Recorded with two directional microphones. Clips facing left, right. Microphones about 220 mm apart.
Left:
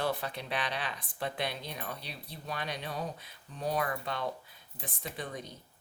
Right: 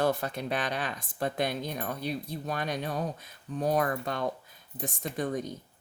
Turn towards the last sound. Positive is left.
turn(degrees=-45)  # may be behind; listen again after turning